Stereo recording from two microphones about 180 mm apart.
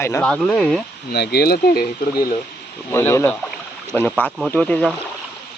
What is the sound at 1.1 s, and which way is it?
Speech, 60° left (ahead or behind).